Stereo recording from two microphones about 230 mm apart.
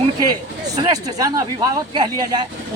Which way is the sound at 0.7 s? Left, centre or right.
Centre.